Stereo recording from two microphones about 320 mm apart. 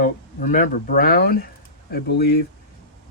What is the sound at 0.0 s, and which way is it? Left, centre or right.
Speech, left.